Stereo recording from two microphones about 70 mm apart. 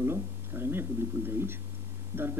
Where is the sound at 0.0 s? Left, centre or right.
Right.